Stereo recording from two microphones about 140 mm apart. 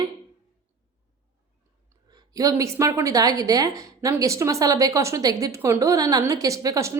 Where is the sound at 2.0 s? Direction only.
25° right (ahead or behind).